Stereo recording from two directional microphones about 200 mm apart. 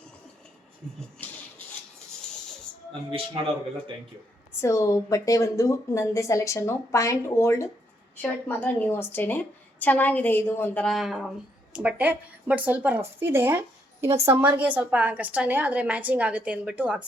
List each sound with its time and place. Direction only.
3.1 s speech: 25° right (ahead or behind)
4.6 s a woman's voice: 15° left (ahead or behind); by 17.1 s 5° right (ahead or behind)